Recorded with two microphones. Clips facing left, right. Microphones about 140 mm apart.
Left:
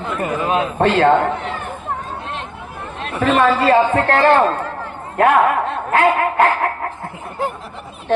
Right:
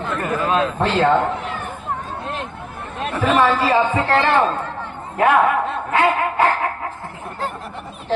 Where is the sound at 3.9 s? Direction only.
55° left (ahead or behind).